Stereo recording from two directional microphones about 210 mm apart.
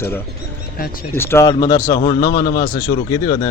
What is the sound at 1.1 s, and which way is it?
A man's voice, 10° left (ahead or behind).